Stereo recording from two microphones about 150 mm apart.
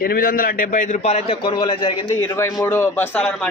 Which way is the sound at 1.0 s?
45° left (ahead or behind).